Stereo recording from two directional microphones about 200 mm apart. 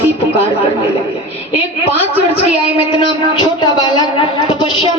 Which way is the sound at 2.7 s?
25° left (ahead or behind).